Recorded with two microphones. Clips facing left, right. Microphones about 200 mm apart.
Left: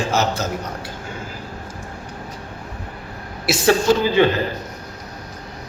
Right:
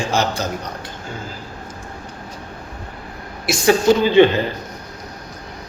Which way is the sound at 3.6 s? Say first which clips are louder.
Right 2 dB; 25° right (ahead or behind).